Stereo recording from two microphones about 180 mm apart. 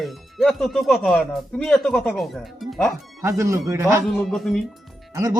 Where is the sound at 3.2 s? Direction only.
15° right (ahead or behind).